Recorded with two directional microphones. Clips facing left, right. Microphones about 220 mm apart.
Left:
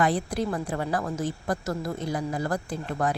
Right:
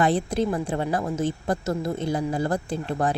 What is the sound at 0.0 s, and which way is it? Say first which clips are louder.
A woman's voice: right 3 dB; 25° right (ahead or behind).